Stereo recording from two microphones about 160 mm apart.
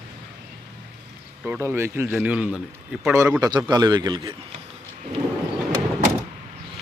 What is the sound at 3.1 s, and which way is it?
A man's voice, 20° right (ahead or behind).